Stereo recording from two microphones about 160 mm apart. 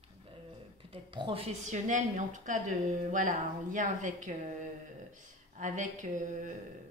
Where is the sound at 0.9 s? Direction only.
35° right (ahead or behind); by 4.3 s 50° right (ahead or behind).